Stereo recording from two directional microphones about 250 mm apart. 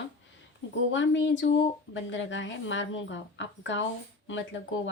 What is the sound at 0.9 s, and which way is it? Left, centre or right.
A woman's voice, left.